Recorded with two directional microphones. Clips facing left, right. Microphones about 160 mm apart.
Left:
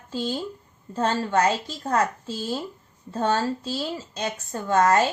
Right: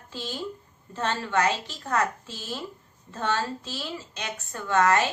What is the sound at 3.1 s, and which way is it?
A woman's voice, 40° left (ahead or behind).